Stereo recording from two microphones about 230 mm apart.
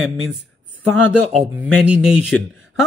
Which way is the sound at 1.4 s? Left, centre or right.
Centre.